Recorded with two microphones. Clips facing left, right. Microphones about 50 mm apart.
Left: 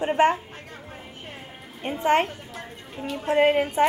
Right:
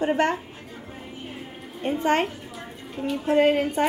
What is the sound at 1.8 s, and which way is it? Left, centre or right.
Speech, centre.